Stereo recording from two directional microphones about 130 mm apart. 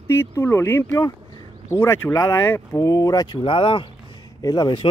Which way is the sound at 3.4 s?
40° left (ahead or behind).